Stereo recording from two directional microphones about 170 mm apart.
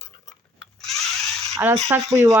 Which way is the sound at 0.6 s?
Centre (ahead or behind).